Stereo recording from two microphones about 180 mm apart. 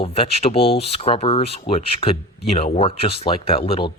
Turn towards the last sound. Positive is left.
turn(degrees=30)  # may be behind; listen again after turning